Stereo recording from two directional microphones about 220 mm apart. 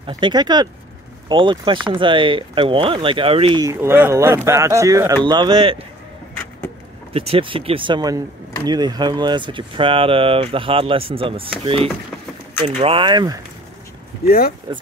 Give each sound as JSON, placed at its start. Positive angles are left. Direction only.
{"t": 0.0, "sound": "speech", "side_deg": -20}
{"t": 7.2, "sound": "speech", "side_deg": -25}
{"t": 14.2, "sound": "speech", "side_deg": 45}